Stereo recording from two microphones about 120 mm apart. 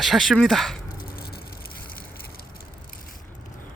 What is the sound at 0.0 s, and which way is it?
Speech, centre (ahead or behind).